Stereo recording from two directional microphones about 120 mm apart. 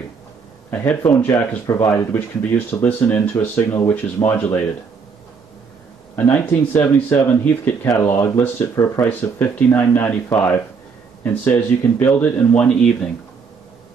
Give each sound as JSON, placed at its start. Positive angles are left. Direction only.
{"t": 0.7, "sound": "speech", "side_deg": 15}
{"t": 6.1, "sound": "speech", "side_deg": 15}